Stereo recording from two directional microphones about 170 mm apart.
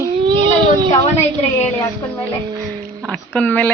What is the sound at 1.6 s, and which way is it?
Speech, 15° left (ahead or behind).